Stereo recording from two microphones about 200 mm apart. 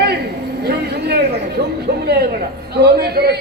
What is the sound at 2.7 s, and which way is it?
Speech, 55° right (ahead or behind).